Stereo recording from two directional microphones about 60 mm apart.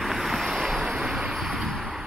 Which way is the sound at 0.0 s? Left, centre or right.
Centre.